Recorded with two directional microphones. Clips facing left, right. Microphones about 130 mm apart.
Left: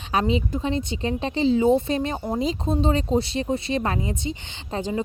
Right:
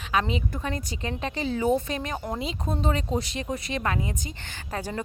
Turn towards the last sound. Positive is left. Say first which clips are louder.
# left 5 dB
turn(degrees=20)  # may be behind; listen again after turning